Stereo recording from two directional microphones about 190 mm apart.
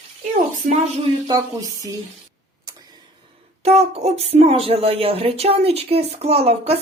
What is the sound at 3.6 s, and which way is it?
Speech, 35° right (ahead or behind).